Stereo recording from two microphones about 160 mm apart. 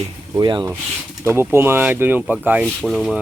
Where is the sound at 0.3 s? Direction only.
30° right (ahead or behind).